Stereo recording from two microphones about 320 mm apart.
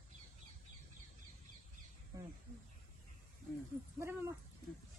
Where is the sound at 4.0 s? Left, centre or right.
Centre.